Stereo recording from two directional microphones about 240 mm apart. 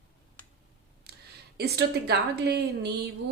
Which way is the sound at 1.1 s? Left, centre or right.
Right.